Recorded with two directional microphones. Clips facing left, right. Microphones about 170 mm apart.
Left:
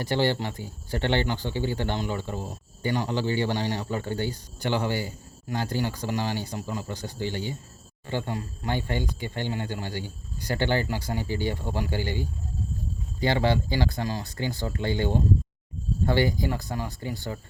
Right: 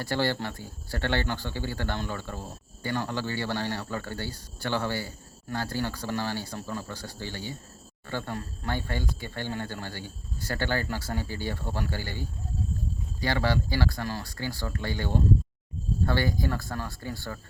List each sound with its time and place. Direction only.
0.0 s speech: 20° left (ahead or behind)